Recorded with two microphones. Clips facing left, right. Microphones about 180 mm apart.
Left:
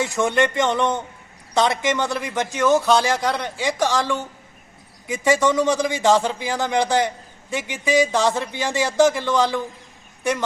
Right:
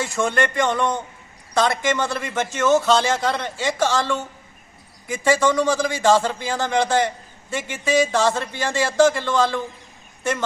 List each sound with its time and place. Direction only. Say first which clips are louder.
0.0 s a man's voice: left 2 dB; 20° left (ahead or behind)
5.2 s a man's voice: even; 20° left (ahead or behind)